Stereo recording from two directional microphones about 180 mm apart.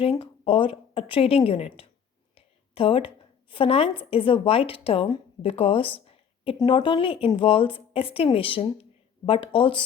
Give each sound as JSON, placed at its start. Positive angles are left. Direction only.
{"t": 0.0, "sound": "a woman's voice", "side_deg": 30}
{"t": 2.3, "sound": "a sound", "side_deg": 30}
{"t": 3.5, "sound": "a woman's voice", "side_deg": 30}